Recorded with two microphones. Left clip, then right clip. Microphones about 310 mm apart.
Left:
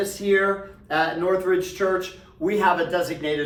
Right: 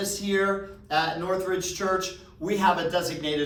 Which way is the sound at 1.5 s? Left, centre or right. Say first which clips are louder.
Left 5 dB; centre.